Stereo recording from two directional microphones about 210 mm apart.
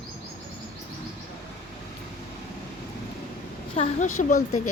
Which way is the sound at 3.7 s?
35° left (ahead or behind).